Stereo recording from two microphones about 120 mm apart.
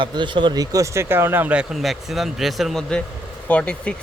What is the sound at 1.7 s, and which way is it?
Speech, centre (ahead or behind).